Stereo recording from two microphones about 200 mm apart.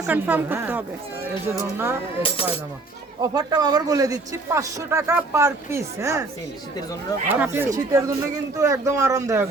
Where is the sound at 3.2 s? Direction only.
20° right (ahead or behind).